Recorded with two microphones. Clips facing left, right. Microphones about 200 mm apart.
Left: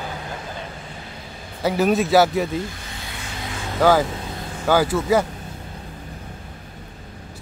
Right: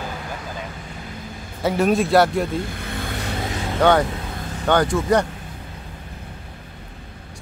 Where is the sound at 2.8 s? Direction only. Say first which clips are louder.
Right 7 dB; 55° right (ahead or behind).